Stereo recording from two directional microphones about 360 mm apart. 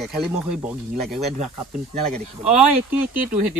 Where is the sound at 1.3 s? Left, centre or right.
Centre.